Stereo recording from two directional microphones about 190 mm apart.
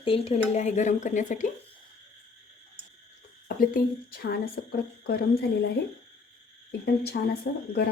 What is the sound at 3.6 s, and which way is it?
Speech, 50° left (ahead or behind).